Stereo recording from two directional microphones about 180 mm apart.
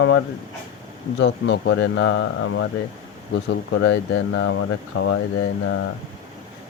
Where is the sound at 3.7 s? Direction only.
85° left.